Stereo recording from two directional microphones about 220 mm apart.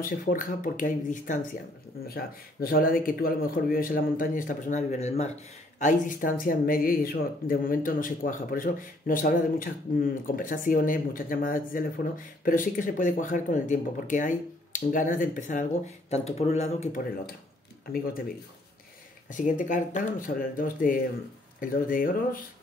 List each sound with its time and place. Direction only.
0.0 s speech: 40° left (ahead or behind)
19.3 s speech: 35° left (ahead or behind)